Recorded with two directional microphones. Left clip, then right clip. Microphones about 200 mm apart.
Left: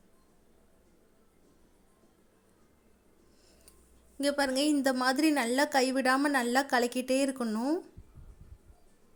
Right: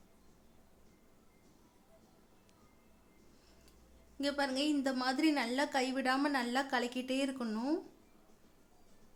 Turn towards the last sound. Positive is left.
turn(degrees=25)  # may be behind; listen again after turning